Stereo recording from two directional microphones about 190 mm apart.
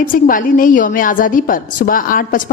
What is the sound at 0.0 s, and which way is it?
A woman's voice, 45° left (ahead or behind).